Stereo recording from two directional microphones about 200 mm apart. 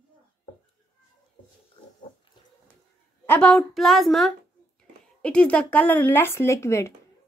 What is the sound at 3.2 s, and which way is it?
A woman's voice, 5° left (ahead or behind).